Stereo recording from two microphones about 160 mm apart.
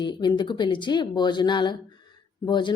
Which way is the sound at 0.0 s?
25° left (ahead or behind).